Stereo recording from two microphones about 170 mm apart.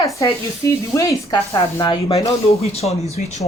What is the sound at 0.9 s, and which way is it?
Speech, 20° left (ahead or behind).